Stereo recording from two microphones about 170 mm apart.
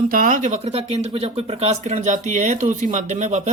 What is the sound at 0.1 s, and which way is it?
Speech, 55° right (ahead or behind).